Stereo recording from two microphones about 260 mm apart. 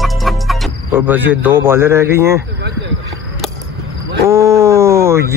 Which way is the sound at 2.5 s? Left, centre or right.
Right.